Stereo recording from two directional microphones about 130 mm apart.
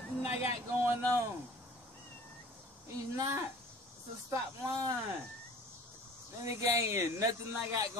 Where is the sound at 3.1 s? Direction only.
25° right (ahead or behind).